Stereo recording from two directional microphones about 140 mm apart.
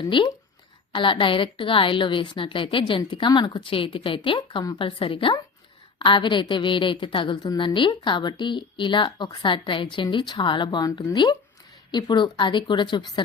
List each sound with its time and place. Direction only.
0.0 s a woman's voice: 35° left (ahead or behind)